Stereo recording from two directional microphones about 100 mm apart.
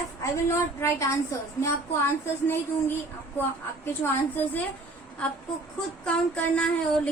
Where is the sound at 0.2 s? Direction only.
30° left (ahead or behind).